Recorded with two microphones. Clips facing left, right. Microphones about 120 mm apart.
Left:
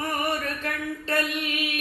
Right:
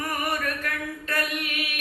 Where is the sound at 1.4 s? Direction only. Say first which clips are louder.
Left 3 dB; 25° left (ahead or behind).